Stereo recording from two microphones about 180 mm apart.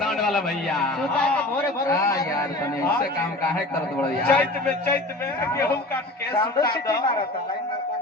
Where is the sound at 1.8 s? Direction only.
15° left (ahead or behind).